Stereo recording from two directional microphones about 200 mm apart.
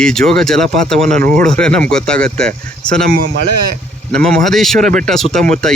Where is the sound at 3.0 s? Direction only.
50° right (ahead or behind).